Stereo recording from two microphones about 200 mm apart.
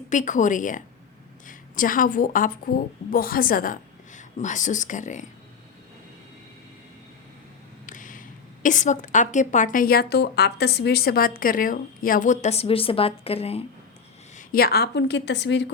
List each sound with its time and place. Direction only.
0.1 s a woman's voice: 40° left (ahead or behind)
7.9 s a sound: 40° left (ahead or behind)
8.6 s a woman's voice: 40° left (ahead or behind)
14.3 s a woman's voice: 50° left (ahead or behind)